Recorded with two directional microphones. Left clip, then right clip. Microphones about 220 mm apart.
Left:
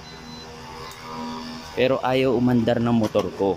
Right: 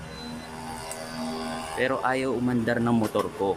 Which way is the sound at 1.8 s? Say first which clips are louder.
Left 6 dB; 10° left (ahead or behind).